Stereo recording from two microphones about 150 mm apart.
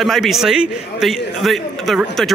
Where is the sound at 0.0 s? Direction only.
Centre (ahead or behind).